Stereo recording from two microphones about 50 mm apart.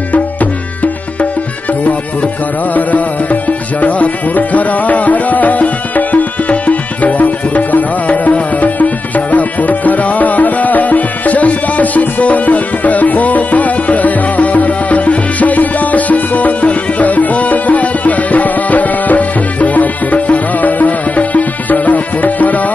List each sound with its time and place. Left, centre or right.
2.7 s music: left